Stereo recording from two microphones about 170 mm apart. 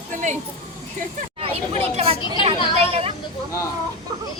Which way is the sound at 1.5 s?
35° right (ahead or behind).